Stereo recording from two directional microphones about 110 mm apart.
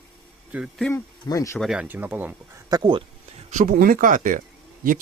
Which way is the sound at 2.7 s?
40° right (ahead or behind).